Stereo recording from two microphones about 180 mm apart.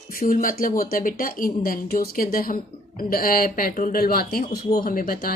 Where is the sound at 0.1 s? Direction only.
50° left (ahead or behind).